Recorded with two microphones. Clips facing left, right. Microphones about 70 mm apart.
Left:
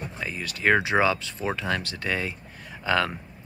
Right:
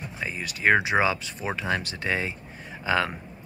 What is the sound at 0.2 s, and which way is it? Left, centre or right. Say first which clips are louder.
Speech: right 1 dB; right.